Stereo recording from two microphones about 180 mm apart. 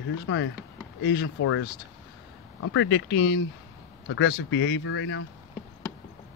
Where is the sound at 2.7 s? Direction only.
90° left.